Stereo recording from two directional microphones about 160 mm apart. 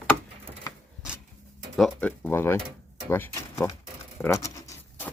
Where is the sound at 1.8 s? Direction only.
10° left (ahead or behind).